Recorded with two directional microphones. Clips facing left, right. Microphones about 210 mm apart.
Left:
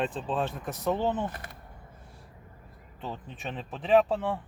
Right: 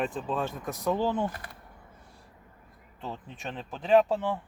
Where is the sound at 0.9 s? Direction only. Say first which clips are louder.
Right 1 dB; 20° left (ahead or behind).